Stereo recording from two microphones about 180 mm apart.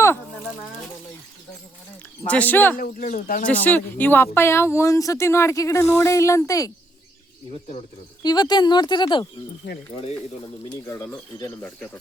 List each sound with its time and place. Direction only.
2.2 s speech: 10° left (ahead or behind)
2.7 s speech: 50° left (ahead or behind)
3.4 s speech: 10° left (ahead or behind)
8.2 s a woman's voice: 20° left (ahead or behind)
10.7 s a woman's voice: 15° left (ahead or behind)